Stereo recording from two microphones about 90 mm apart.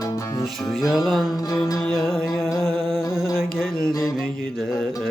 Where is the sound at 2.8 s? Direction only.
5° right (ahead or behind).